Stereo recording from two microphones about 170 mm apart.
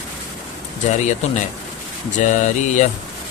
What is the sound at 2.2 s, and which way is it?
Speech, 45° left (ahead or behind).